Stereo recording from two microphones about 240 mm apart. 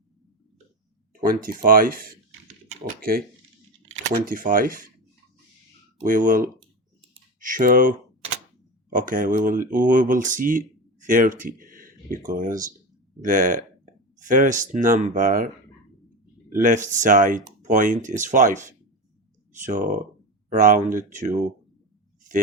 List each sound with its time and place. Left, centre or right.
1.1 s speech: right
4.3 s speech: right
6.1 s speech: right
16.6 s speech: right